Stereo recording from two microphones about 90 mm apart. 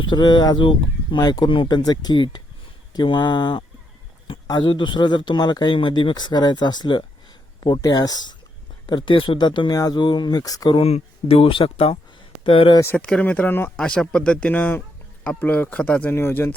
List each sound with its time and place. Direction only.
0.0 s speech: 60° left (ahead or behind)
1.2 s speech: 45° left (ahead or behind)
8.9 s speech: 65° left (ahead or behind); by 9.4 s 80° left
9.4 s speech: 55° left (ahead or behind)
11.3 s speech: 85° left
12.5 s speech: 75° left (ahead or behind)
13.0 s speech: 10° left (ahead or behind)
13.2 s speech: 20° left (ahead or behind)
13.7 s speech: 10° left (ahead or behind)